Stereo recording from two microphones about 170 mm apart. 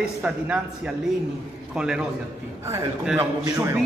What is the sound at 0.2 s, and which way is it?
A man's voice, 10° right (ahead or behind).